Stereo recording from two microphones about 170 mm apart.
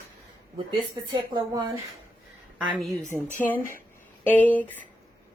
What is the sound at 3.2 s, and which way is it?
Speech, 50° left (ahead or behind).